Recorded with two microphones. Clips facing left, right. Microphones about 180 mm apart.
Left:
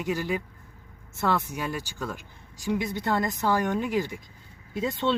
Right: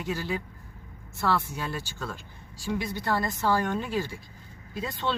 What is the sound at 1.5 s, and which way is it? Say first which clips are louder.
Speech: left 2 dB; 15° left (ahead or behind).